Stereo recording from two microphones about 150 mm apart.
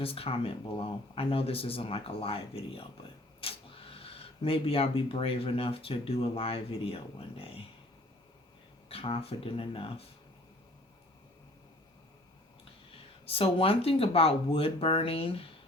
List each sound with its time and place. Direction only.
0.0 s speech: 40° left (ahead or behind)
8.9 s speech: 40° left (ahead or behind)
13.2 s speech: 40° left (ahead or behind)